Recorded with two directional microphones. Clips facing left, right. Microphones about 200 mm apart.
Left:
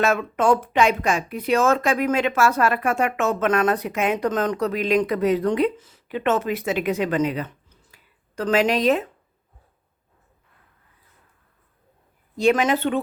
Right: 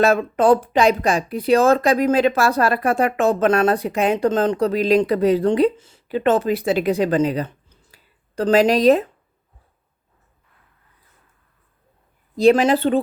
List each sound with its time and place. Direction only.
0.0 s speech: 35° right (ahead or behind)
12.4 s speech: 35° right (ahead or behind)